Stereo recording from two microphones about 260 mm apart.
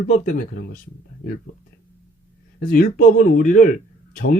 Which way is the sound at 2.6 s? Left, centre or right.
Left.